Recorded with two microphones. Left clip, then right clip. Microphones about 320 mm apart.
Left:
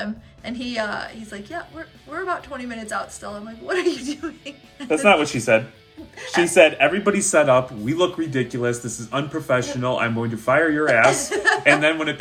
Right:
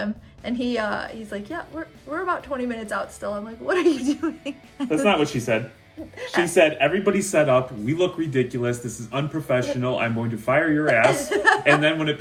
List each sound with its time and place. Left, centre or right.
0.0 s speech: centre
4.9 s speech: centre
11.0 s speech: centre
11.8 s speech: centre